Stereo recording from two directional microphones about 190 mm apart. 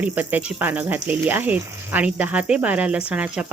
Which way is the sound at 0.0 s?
10° right (ahead or behind).